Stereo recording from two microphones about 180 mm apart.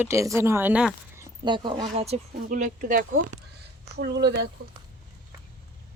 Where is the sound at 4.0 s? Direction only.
65° right (ahead or behind).